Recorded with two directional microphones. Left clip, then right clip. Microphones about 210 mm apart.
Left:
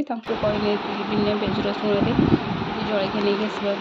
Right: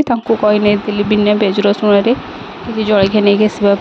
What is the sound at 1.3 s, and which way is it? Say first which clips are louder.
Speech: right 11 dB; 40° right (ahead or behind).